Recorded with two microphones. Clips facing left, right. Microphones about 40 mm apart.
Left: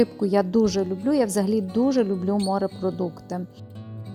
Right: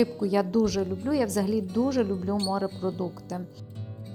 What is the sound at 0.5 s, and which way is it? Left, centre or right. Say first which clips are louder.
Speech: left 4 dB; left.